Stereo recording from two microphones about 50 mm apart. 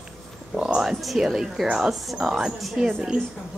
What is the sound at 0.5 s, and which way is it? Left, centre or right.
Speech, centre.